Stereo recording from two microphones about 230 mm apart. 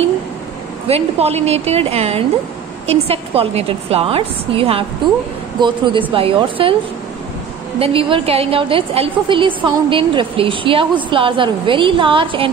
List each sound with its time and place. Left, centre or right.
0.8 s a woman's voice: right
7.8 s a woman's voice: right